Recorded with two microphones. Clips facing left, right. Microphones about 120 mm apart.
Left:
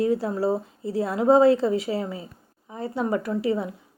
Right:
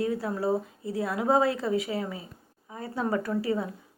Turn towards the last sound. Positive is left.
turn(degrees=20)  # may be behind; listen again after turning